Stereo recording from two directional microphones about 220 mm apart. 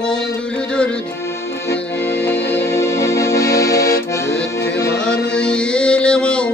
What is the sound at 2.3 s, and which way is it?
Music, 50° left (ahead or behind).